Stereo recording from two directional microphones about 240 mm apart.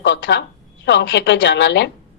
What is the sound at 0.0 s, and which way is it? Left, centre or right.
A woman's voice, left.